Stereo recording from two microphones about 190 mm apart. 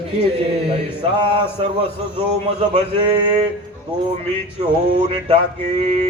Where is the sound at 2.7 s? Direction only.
25° right (ahead or behind).